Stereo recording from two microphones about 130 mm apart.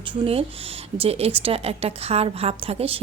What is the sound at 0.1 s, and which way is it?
A woman's voice, 45° right (ahead or behind).